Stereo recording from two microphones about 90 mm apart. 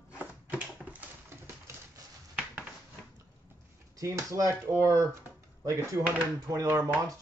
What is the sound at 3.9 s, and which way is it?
Speech, 35° right (ahead or behind).